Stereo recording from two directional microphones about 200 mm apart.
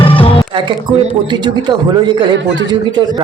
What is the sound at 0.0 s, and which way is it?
Music, 25° left (ahead or behind).